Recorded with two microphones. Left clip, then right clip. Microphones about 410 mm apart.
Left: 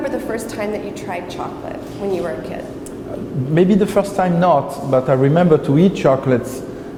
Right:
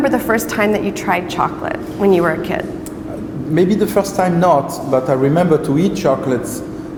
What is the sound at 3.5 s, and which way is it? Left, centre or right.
A man's voice, left.